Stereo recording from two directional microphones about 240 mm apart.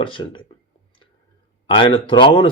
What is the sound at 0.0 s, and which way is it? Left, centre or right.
Speech, left.